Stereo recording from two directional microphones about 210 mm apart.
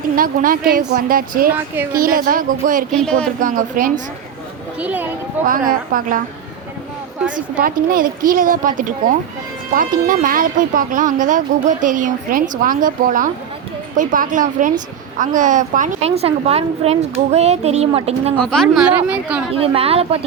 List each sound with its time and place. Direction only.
0.2 s a woman's voice: 40° right (ahead or behind)
1.5 s speech: 10° right (ahead or behind)
1.9 s speech: 40° right (ahead or behind)
2.9 s a woman's voice: 5° left (ahead or behind)
3.4 s speech: 40° right (ahead or behind)
4.8 s speech: 5° right (ahead or behind)
5.5 s speech: 40° right (ahead or behind)
7.6 s speech: 40° right (ahead or behind)
18.3 s a woman's voice: 5° left (ahead or behind)
19.5 s a woman's voice: 25° right (ahead or behind)